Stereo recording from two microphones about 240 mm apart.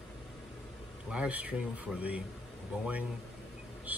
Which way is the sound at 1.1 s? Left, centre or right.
Centre.